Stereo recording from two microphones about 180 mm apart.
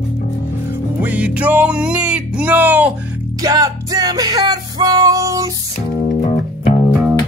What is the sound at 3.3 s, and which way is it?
Music, 20° right (ahead or behind).